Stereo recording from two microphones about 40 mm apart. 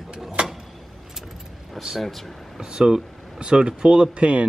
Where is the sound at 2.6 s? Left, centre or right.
Centre.